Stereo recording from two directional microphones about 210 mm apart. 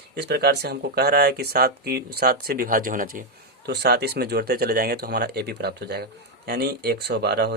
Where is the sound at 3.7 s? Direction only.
50° right (ahead or behind).